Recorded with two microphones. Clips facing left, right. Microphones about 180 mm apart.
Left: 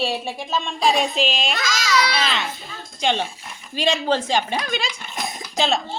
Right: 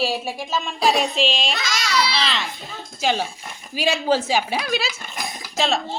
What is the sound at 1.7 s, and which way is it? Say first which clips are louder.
Speech: left 3 dB; 60° right (ahead or behind).